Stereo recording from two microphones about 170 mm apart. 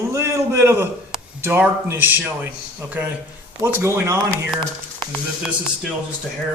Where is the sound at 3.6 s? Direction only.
15° right (ahead or behind).